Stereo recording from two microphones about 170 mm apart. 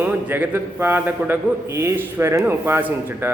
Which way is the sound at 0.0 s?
10° right (ahead or behind).